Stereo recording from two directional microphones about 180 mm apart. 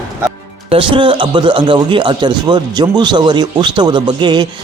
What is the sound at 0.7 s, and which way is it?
A man's voice, 30° right (ahead or behind).